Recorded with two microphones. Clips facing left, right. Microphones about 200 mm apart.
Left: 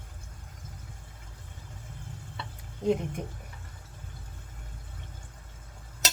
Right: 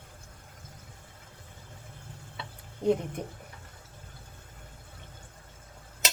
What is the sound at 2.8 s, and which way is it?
Speech, 30° right (ahead or behind).